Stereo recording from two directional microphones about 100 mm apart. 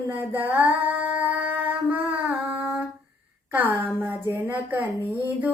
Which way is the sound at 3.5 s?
20° right (ahead or behind).